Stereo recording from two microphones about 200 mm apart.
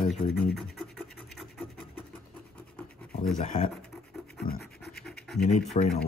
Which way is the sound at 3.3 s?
40° left (ahead or behind).